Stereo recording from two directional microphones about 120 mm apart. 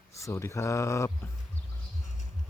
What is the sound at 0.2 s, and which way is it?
Speech, 25° left (ahead or behind).